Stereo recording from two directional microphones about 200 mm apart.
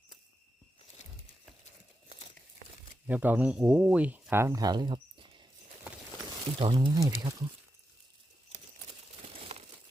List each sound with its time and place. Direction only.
3.1 s speech: 10° right (ahead or behind); by 5.5 s 25° right (ahead or behind)
6.6 s speech: 25° right (ahead or behind)
8.5 s crumpling: 30° right (ahead or behind)